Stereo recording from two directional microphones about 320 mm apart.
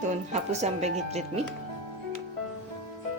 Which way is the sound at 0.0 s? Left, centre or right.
Right.